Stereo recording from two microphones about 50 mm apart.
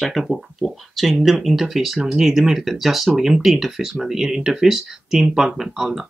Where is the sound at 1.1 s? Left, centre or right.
Centre.